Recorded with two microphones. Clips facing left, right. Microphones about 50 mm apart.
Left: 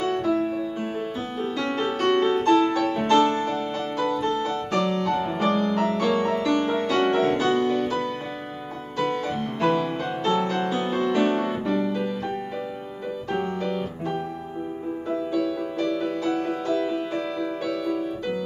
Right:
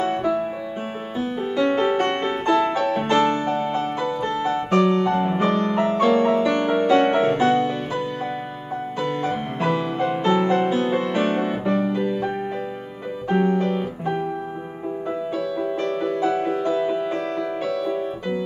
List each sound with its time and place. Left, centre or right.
0.0 s music: right
9.1 s music: right
13.3 s piano: centre
13.6 s music: right